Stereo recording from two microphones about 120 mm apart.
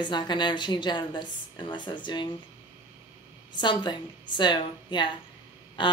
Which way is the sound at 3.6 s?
40° left (ahead or behind).